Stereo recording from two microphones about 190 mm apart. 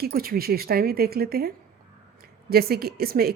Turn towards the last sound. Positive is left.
turn(degrees=-55)  # may be behind; listen again after turning